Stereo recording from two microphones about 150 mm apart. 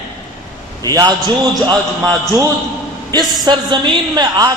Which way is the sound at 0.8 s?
25° right (ahead or behind).